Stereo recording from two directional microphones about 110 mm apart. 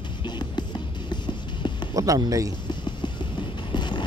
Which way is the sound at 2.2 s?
35° right (ahead or behind).